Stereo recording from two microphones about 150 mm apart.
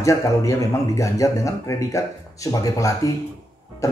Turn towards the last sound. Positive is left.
turn(degrees=20)  # may be behind; listen again after turning